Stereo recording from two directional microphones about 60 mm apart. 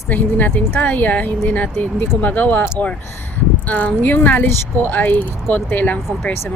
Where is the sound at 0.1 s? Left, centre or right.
Left.